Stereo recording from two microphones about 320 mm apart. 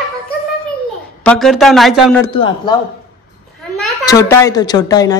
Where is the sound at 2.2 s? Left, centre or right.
Centre.